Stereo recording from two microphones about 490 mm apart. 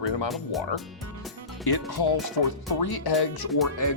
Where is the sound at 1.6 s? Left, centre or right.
Left.